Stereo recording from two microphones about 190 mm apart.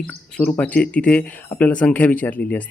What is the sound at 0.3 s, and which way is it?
Speech, 5° left (ahead or behind).